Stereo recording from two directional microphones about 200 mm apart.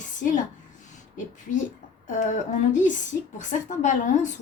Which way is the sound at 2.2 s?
40° left (ahead or behind).